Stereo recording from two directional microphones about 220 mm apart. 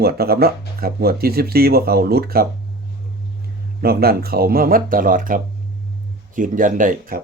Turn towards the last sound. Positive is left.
turn(degrees=-40)  # may be behind; listen again after turning